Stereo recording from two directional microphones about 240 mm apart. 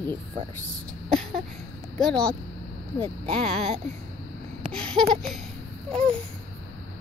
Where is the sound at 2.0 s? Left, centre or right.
Centre.